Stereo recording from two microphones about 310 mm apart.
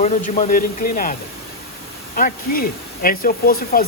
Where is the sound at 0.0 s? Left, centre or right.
Left.